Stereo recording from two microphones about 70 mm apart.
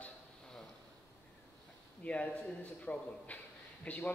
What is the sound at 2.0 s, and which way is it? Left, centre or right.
A man's voice, centre.